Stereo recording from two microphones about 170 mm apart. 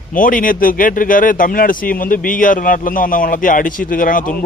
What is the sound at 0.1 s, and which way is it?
Speech, 55° left (ahead or behind).